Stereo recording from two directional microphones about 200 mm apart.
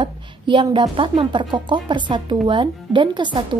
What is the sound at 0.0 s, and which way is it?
A woman's voice, 25° right (ahead or behind).